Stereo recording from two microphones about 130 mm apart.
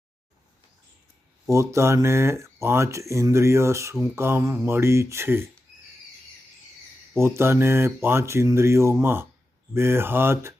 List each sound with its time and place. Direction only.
1.5 s speech: 20° right (ahead or behind)
7.2 s speech: 20° right (ahead or behind)
9.7 s mantra: 20° right (ahead or behind)